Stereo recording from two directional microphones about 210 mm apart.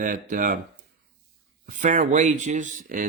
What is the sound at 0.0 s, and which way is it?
Speech, 40° right (ahead or behind).